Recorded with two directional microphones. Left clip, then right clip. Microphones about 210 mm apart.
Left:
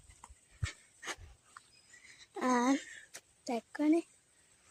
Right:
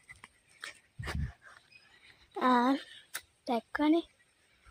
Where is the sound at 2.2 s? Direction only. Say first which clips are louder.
Right 5 dB; centre (ahead or behind).